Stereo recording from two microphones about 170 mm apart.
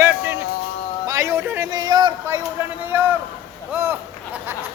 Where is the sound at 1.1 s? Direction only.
20° right (ahead or behind).